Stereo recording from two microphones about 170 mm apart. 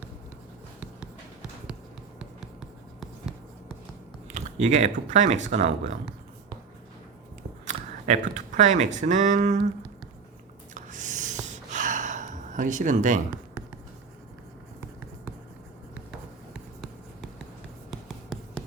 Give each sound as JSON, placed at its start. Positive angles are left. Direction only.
{"t": 2.1, "sound": "writing", "side_deg": -5}
{"t": 4.4, "sound": "speech", "side_deg": -45}
{"t": 7.7, "sound": "speech", "side_deg": -45}
{"t": 10.8, "sound": "a sound", "side_deg": -45}
{"t": 11.4, "sound": "gasp", "side_deg": -45}